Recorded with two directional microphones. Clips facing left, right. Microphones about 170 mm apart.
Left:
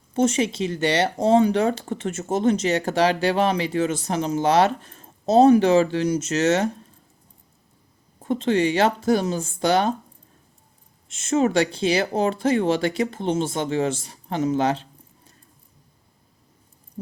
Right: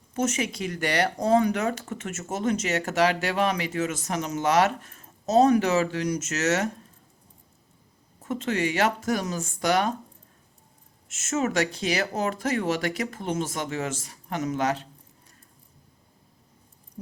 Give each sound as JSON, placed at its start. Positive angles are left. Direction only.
{"t": 0.1, "sound": "speech", "side_deg": 30}
{"t": 8.2, "sound": "speech", "side_deg": 30}
{"t": 11.1, "sound": "speech", "side_deg": 30}